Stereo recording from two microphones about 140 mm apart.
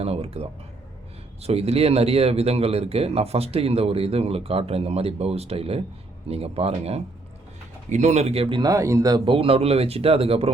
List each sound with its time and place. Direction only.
0.0 s speech: 45° right (ahead or behind)
7.9 s speech: 55° right (ahead or behind); by 8.7 s 35° right (ahead or behind)
8.7 s speech: 20° right (ahead or behind)
9.2 s speech: 40° right (ahead or behind)